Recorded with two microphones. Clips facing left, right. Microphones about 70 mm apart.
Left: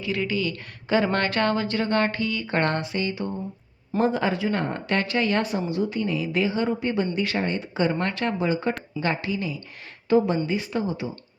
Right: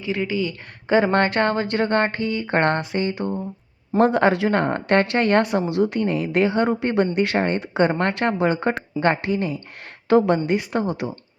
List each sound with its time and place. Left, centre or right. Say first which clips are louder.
0.0 s a woman's voice: right 2 dB; right
3.9 s speech: right 6 dB; right
10.1 s speech: right 4 dB; right